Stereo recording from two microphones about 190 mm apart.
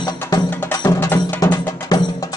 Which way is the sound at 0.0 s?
20° left (ahead or behind).